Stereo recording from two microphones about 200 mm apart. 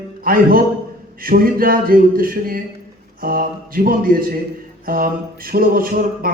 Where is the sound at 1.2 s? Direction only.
45° right (ahead or behind).